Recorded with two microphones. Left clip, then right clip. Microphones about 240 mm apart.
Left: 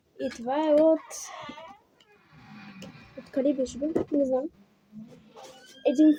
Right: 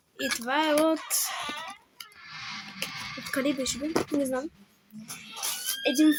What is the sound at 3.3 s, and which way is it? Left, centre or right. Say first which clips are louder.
Speech: left 2 dB; centre.